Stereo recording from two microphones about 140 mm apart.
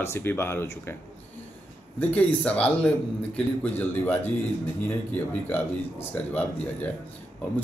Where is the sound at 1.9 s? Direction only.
10° left (ahead or behind).